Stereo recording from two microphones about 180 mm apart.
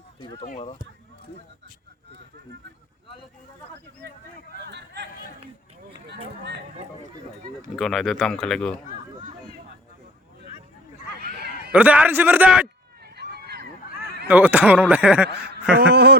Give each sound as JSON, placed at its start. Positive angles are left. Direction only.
{"t": 0.4, "sound": "speech", "side_deg": 40}
{"t": 4.6, "sound": "speech", "side_deg": -70}
{"t": 7.8, "sound": "speech", "side_deg": 0}
{"t": 11.7, "sound": "speech", "side_deg": -10}
{"t": 13.1, "sound": "run", "side_deg": -65}
{"t": 14.3, "sound": "speech", "side_deg": -10}
{"t": 15.8, "sound": "speech", "side_deg": -65}